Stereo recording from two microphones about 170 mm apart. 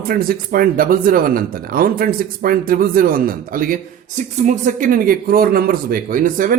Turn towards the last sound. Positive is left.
turn(degrees=-55)  # may be behind; listen again after turning